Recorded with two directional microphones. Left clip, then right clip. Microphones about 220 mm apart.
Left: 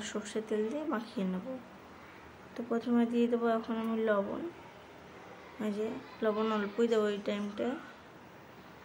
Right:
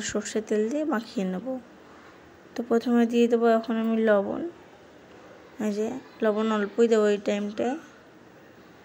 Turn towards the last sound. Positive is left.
turn(degrees=-30)  # may be behind; listen again after turning